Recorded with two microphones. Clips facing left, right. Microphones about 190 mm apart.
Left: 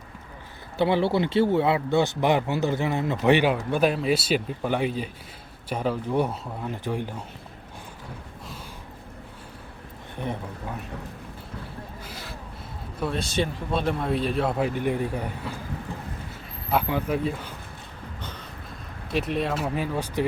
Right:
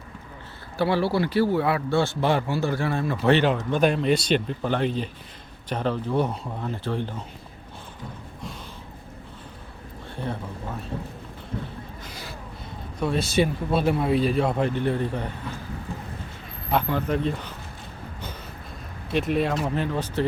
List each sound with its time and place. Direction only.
0.8 s speech: 20° left (ahead or behind)
10.2 s speech: 20° left (ahead or behind)
12.0 s gasp: centre (ahead or behind)
13.0 s speech: centre (ahead or behind)
16.7 s speech: 5° left (ahead or behind)
19.1 s speech: centre (ahead or behind)